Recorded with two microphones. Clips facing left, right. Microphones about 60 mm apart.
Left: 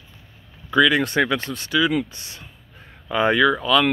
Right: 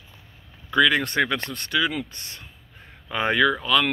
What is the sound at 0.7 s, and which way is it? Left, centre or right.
Speech, centre.